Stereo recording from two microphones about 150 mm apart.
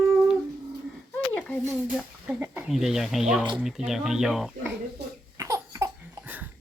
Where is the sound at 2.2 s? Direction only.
15° right (ahead or behind).